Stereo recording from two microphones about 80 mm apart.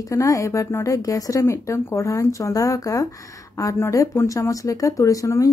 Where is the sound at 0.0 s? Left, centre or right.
Left.